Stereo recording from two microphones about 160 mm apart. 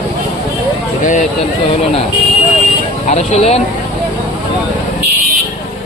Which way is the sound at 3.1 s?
40° left (ahead or behind).